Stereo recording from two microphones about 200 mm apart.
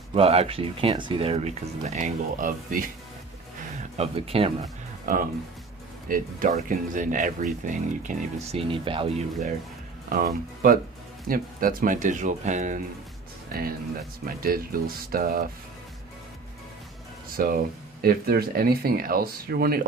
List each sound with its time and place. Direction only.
0.1 s speech: 30° right (ahead or behind)
3.9 s speech: 30° right (ahead or behind)
5.0 s speech: 45° right (ahead or behind); by 9.5 s 30° right (ahead or behind)
10.1 s speech: 45° right (ahead or behind)
13.5 s speech: 50° right (ahead or behind)
17.3 s speech: 45° right (ahead or behind)